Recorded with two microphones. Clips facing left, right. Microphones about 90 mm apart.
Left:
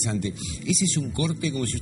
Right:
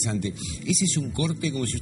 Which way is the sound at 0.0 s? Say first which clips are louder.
Even; 15° left (ahead or behind).